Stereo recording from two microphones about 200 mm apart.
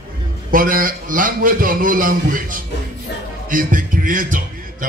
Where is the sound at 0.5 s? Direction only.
45° right (ahead or behind).